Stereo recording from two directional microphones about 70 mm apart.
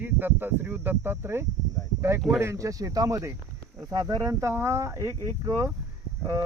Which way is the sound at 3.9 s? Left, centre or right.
Right.